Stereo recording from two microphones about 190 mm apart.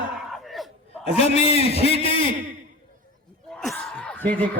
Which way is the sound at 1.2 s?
30° left (ahead or behind).